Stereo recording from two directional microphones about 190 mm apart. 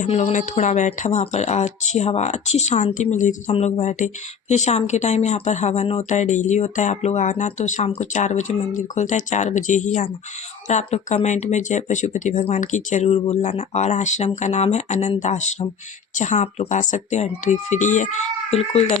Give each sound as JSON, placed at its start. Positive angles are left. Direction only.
{"t": 0.0, "sound": "speech", "side_deg": 40}